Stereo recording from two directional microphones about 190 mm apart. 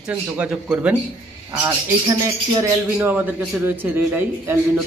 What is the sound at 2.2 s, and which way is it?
A man's voice, 15° right (ahead or behind).